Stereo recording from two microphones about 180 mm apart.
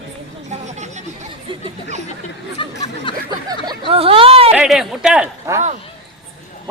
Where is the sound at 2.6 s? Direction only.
25° left (ahead or behind).